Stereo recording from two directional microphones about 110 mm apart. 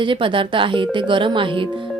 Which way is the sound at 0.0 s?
50° right (ahead or behind).